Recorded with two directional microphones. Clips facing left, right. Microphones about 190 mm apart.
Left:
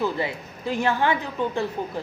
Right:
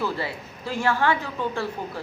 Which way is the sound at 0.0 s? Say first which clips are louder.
Left 2 dB; 20° left (ahead or behind).